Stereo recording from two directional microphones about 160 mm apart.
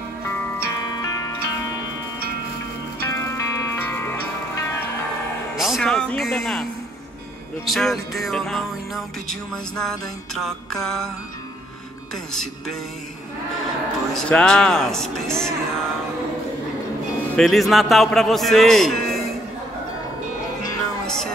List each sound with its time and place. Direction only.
0.6 s music: 20° left (ahead or behind)
3.0 s music: 15° left (ahead or behind)
5.6 s speech: centre (ahead or behind)
7.6 s music: centre (ahead or behind)
14.1 s music: 5° left (ahead or behind)
17.4 s music: centre (ahead or behind)
21.0 s music: 5° left (ahead or behind)